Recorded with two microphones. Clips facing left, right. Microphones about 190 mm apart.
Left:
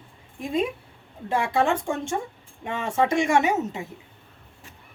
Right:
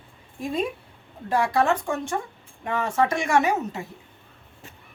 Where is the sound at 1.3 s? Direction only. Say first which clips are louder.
Right 1 dB; 25° left (ahead or behind).